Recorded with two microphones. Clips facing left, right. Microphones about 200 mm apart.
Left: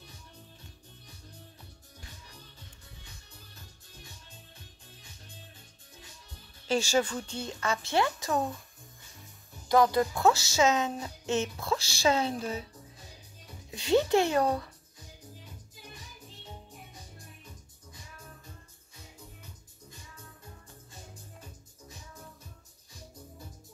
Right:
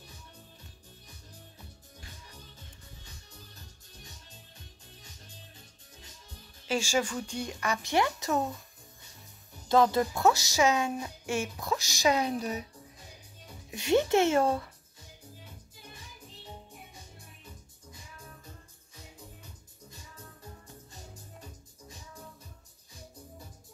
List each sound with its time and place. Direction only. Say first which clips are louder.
6.7 s speech: left 2 dB; 10° right (ahead or behind)
9.7 s speech: even; 25° right (ahead or behind)
13.7 s music: even; 20° right (ahead or behind)
14.1 s a child's voice: right 1 dB; 25° right (ahead or behind)